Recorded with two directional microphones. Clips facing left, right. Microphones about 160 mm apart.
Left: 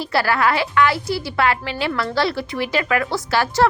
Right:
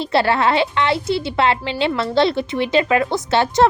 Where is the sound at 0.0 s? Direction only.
25° right (ahead or behind).